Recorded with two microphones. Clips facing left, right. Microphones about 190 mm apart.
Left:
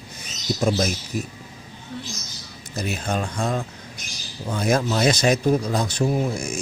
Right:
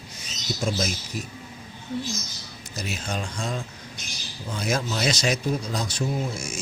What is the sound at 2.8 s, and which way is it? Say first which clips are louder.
Speech: left 5 dB; 60° left (ahead or behind).